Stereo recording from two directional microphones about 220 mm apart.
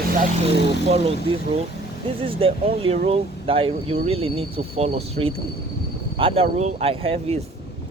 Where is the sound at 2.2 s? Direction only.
25° right (ahead or behind).